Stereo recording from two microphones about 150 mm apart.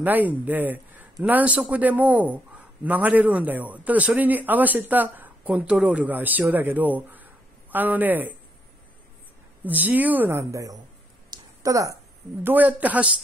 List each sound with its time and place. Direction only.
0.0 s a man's voice: 10° right (ahead or behind)
9.7 s a man's voice: 10° right (ahead or behind)
11.2 s a sound: 20° right (ahead or behind)
12.4 s a man's voice: 10° right (ahead or behind)